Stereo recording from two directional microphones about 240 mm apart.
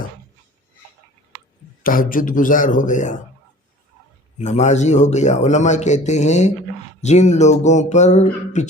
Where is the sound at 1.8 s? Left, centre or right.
Left.